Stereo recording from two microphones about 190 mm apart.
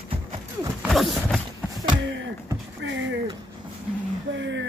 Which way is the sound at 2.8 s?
75° right (ahead or behind).